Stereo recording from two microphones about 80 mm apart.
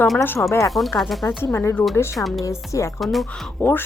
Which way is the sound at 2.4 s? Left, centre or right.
Left.